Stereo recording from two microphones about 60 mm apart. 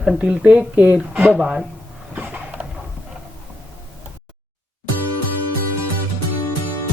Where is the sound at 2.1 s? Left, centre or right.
Right.